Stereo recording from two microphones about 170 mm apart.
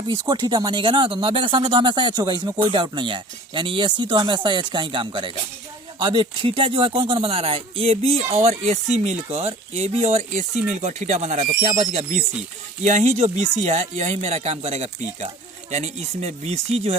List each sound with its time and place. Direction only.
0.1 s speech: 25° right (ahead or behind)